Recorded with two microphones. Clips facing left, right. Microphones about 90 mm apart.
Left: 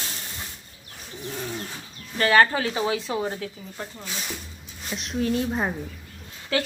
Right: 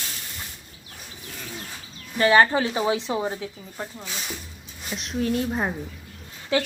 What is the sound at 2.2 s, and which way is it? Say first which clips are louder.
Speech: right 1 dB; 20° right (ahead or behind).